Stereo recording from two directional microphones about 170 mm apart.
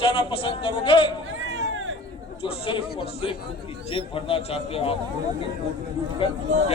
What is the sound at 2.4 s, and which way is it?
Speech, 30° left (ahead or behind).